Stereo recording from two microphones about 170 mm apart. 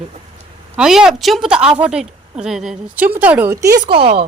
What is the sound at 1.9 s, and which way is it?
A woman's voice, 5° right (ahead or behind).